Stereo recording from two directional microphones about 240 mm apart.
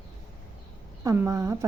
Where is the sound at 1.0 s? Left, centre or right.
Centre.